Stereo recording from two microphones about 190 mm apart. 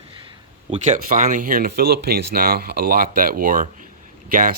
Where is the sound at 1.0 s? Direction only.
45° right (ahead or behind).